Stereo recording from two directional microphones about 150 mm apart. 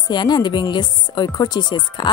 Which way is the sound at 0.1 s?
30° left (ahead or behind).